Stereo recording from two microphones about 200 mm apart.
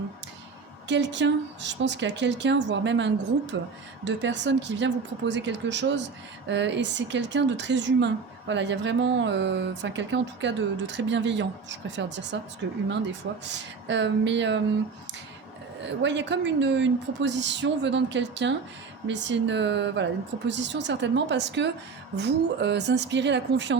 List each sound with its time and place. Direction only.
0.9 s speech: 60° right (ahead or behind)
16.0 s speech: 60° right (ahead or behind)